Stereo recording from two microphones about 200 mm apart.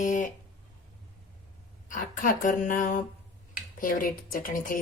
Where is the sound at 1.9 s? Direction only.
40° left (ahead or behind).